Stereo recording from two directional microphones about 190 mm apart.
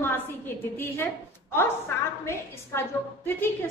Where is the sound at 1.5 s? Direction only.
15° left (ahead or behind).